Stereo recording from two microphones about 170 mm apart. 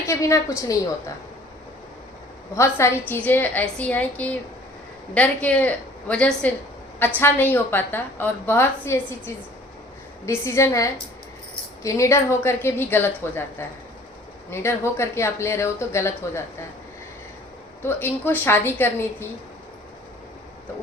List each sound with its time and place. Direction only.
0.1 s a woman's voice: 15° left (ahead or behind)
2.6 s a woman's voice: 15° left (ahead or behind)
17.8 s a woman's voice: 15° left (ahead or behind)